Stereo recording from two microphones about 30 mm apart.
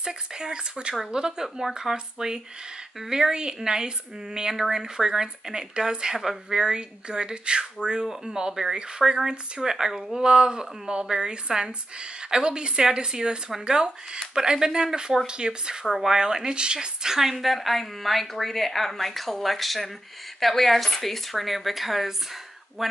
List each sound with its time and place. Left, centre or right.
0.0 s speech: right
16.5 s speech: right
17.2 s a woman's voice: centre
22.8 s speech: centre